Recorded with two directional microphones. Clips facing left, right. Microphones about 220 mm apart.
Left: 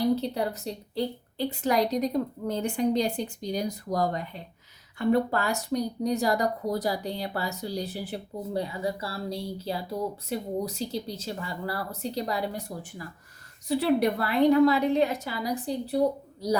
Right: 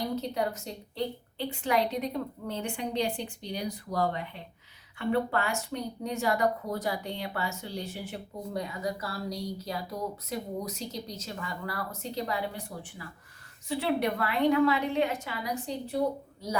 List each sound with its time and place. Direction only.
0.2 s speech: 35° left (ahead or behind)